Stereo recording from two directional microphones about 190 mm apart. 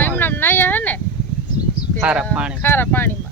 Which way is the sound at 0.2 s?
10° left (ahead or behind).